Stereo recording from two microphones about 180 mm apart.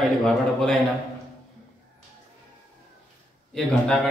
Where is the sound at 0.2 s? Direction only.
5° left (ahead or behind).